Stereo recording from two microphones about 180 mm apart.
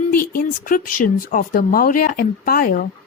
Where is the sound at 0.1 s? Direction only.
55° left (ahead or behind).